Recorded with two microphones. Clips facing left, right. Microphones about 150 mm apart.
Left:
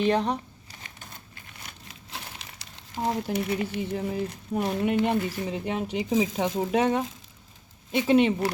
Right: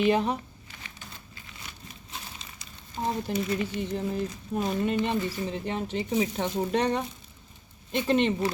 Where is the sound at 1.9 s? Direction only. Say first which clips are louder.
Left 3 dB; 90° left.